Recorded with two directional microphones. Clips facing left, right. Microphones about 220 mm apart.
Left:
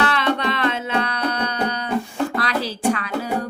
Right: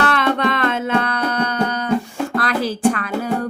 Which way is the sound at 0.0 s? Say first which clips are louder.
Right 3 dB; 50° right (ahead or behind).